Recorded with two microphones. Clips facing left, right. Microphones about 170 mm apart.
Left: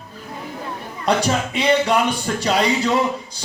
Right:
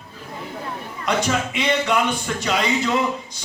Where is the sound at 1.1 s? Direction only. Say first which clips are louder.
Left 3 dB; 35° left (ahead or behind).